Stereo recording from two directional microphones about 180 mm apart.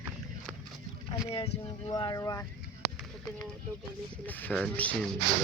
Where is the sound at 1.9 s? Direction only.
25° left (ahead or behind).